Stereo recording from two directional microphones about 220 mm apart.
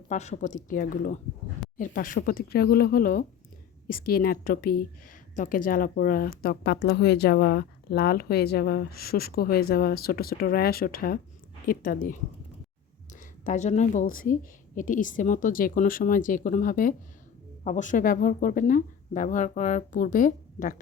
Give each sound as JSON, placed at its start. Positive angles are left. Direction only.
{"t": 0.1, "sound": "a woman's voice", "side_deg": 30}
{"t": 13.1, "sound": "a woman's voice", "side_deg": 35}